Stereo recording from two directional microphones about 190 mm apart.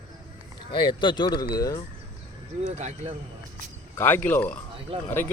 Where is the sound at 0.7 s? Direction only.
25° left (ahead or behind).